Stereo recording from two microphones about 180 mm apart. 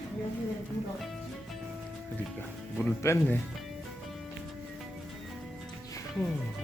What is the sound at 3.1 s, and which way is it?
Speech, 15° left (ahead or behind).